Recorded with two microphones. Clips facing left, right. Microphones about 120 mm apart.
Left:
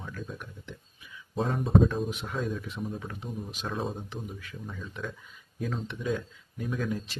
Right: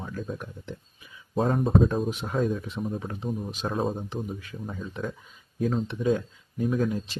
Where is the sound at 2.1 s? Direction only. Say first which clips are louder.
Right 6 dB; 30° right (ahead or behind).